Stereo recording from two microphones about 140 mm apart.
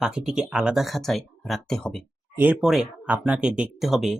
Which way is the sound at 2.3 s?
15° right (ahead or behind).